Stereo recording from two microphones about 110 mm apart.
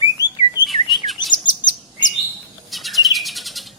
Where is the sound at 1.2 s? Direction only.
40° left (ahead or behind).